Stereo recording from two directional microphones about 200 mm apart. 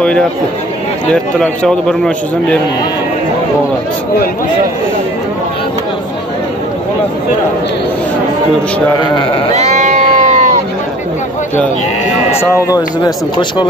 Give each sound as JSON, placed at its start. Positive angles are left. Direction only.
{"t": 0.0, "sound": "a man's voice", "side_deg": 5}
{"t": 9.1, "sound": "speech", "side_deg": 25}
{"t": 9.5, "sound": "sheep", "side_deg": -35}
{"t": 12.7, "sound": "speech", "side_deg": 20}